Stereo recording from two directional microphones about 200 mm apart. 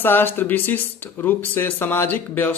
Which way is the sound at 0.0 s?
10° left (ahead or behind).